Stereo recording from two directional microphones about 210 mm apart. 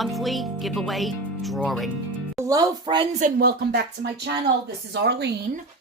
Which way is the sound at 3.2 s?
40° right (ahead or behind).